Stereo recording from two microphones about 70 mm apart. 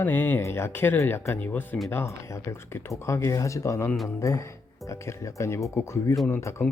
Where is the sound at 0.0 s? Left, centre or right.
Left.